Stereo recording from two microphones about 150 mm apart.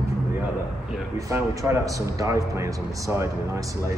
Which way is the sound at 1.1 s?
20° right (ahead or behind).